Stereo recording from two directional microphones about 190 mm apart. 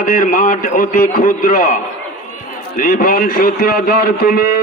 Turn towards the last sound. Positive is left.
turn(degrees=55)  # may be behind; listen again after turning